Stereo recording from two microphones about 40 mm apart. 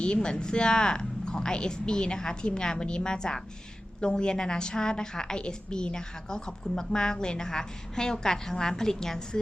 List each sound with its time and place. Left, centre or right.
0.0 s a woman's voice: left